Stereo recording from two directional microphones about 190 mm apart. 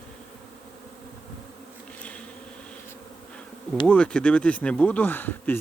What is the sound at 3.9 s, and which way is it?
Speech, 5° left (ahead or behind).